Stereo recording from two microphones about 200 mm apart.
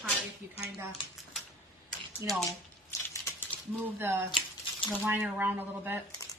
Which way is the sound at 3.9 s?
10° right (ahead or behind).